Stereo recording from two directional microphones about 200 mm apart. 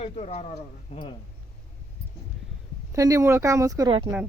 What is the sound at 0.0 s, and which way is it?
Speech, 30° left (ahead or behind).